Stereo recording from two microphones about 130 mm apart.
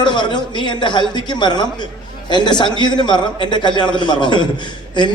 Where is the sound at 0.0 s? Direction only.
35° left (ahead or behind).